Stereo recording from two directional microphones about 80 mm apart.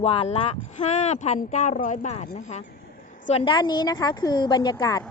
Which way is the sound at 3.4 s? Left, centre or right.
Left.